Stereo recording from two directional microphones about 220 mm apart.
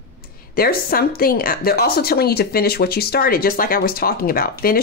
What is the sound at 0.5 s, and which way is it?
A woman's voice, 45° left (ahead or behind).